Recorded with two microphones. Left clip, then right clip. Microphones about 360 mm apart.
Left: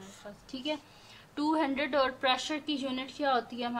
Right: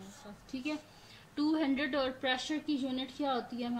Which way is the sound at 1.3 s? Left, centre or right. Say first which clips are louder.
Left 3 dB; centre.